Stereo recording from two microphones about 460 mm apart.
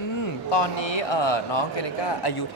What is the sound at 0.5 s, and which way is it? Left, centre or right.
A man's voice, left.